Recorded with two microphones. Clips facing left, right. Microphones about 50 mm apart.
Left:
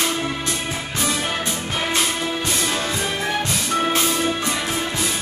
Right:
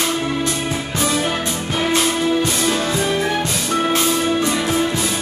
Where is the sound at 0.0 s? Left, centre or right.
Centre.